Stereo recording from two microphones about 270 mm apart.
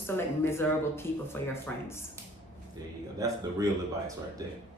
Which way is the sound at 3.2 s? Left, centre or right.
Centre.